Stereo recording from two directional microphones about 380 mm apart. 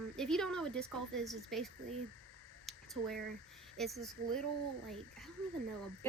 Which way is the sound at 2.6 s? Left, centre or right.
Centre.